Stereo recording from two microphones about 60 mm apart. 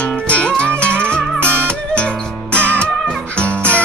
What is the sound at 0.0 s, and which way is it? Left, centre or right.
Music, left.